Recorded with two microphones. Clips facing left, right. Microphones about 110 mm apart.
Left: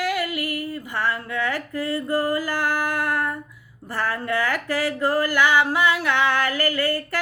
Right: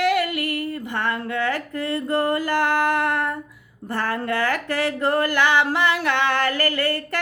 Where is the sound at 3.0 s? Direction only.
25° right (ahead or behind).